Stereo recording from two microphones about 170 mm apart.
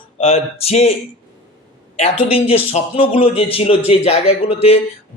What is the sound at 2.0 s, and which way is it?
A man's voice, 35° left (ahead or behind).